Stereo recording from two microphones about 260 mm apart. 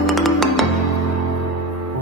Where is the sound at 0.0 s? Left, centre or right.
Centre.